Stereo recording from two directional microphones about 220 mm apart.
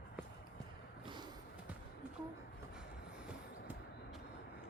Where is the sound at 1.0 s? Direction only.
20° right (ahead or behind).